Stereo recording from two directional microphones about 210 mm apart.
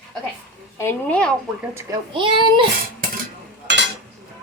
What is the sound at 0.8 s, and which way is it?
Speech, 10° left (ahead or behind).